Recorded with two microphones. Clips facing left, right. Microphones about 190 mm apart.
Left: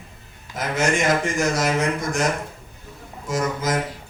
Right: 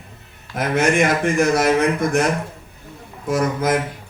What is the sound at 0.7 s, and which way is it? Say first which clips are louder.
A man's voice: right 3 dB; 60° right (ahead or behind).